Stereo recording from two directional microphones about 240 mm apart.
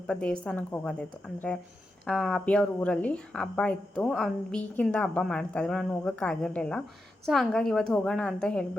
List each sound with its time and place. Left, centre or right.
0.1 s a woman's voice: centre